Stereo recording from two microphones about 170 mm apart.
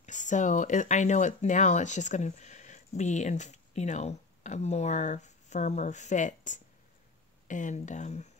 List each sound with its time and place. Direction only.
0.0 s speech: 45° left (ahead or behind)